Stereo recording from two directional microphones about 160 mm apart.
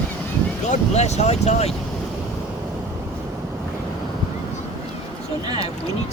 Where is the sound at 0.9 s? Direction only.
45° left (ahead or behind).